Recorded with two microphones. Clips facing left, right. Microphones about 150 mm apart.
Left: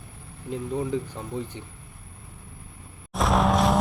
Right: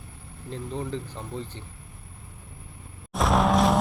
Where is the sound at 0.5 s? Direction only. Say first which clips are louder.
Left 5 dB; 10° left (ahead or behind).